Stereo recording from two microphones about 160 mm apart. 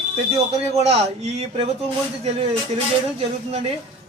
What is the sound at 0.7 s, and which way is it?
Speech, 40° right (ahead or behind).